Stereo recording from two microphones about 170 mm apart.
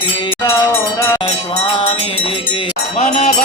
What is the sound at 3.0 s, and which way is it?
Cowbell, 45° left (ahead or behind).